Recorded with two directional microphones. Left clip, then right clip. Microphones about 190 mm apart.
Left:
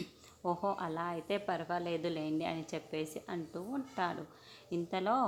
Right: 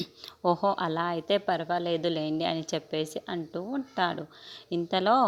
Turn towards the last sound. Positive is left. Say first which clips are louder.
# right 9 dB
turn(degrees=-40)  # may be behind; listen again after turning